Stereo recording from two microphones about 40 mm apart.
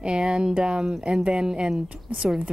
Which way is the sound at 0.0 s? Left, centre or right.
Right.